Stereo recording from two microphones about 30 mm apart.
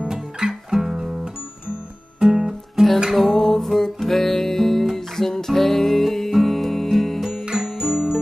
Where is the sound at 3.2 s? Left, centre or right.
Centre.